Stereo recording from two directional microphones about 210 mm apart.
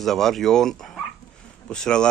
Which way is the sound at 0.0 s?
Centre (ahead or behind).